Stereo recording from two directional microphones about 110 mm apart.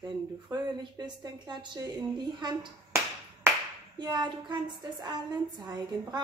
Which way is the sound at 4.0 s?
40° right (ahead or behind).